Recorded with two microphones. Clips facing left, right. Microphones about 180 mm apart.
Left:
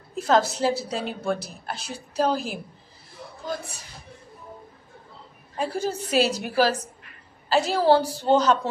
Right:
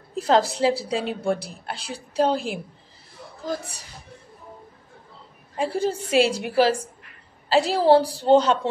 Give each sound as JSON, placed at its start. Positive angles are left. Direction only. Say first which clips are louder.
{"t": 0.1, "sound": "a woman's voice", "louder": "right 1 dB", "side_deg": -35}
{"t": 5.6, "sound": "a woman's voice", "louder": "right 3 dB", "side_deg": -30}